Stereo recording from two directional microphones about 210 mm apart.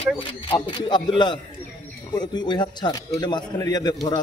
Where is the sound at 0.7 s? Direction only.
20° left (ahead or behind).